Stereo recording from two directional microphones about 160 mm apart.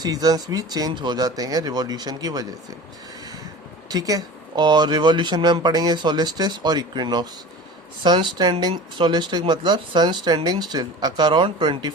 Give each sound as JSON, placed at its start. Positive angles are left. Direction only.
{"t": 0.0, "sound": "speech", "side_deg": -25}
{"t": 3.8, "sound": "speech", "side_deg": -25}